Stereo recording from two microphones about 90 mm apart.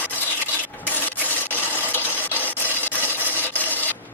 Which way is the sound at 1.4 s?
20° left (ahead or behind).